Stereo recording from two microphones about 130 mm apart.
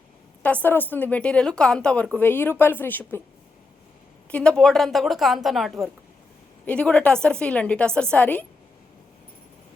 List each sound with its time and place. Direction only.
0.4 s a woman's voice: 10° left (ahead or behind)
4.3 s a woman's voice: 10° left (ahead or behind)